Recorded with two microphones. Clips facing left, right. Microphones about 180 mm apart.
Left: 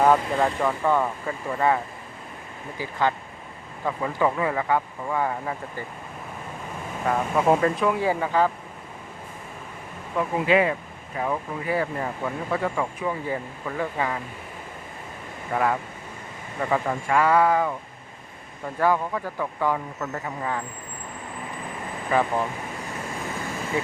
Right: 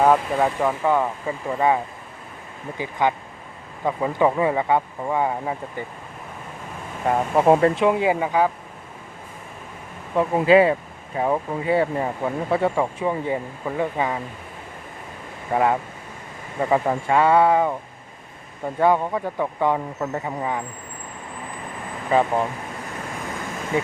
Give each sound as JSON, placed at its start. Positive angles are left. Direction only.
{"t": 0.0, "sound": "speech", "side_deg": -5}
{"t": 7.1, "sound": "speech", "side_deg": -30}
{"t": 10.2, "sound": "speech", "side_deg": -35}
{"t": 15.5, "sound": "speech", "side_deg": -25}
{"t": 18.8, "sound": "speech", "side_deg": -25}
{"t": 22.1, "sound": "speech", "side_deg": -20}